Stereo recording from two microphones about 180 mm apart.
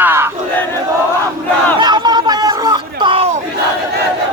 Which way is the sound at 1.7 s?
25° right (ahead or behind).